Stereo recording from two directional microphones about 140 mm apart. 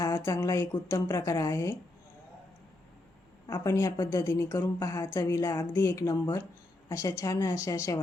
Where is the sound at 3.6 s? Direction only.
25° left (ahead or behind).